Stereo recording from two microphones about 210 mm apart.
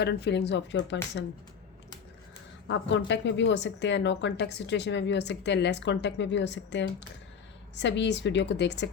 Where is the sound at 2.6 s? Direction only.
60° left (ahead or behind).